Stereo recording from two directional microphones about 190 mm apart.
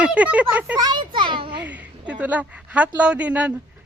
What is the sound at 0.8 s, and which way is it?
Speech, 25° right (ahead or behind).